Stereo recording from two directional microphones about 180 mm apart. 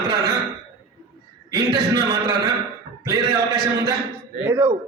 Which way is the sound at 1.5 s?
20° right (ahead or behind).